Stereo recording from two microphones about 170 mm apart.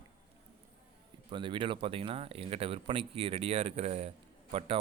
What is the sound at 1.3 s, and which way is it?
Speech, 30° right (ahead or behind).